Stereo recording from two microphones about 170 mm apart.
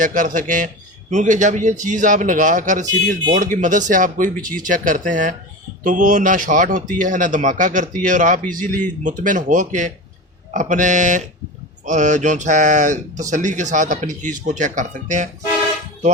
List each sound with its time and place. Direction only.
0.0 s a man's voice: 50° right (ahead or behind)